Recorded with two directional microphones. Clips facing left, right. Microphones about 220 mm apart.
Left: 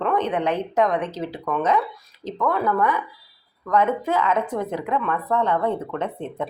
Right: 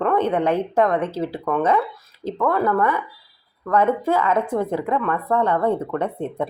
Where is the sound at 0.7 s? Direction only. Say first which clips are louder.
Right 2 dB; 55° right (ahead or behind).